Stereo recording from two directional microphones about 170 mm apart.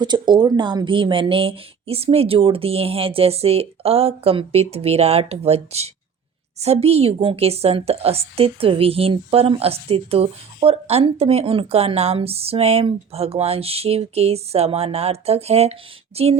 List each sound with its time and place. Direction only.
0.0 s a woman's voice: 25° right (ahead or behind)